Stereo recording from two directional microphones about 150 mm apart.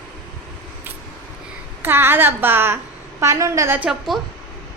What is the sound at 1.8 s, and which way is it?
A woman's voice, 15° right (ahead or behind).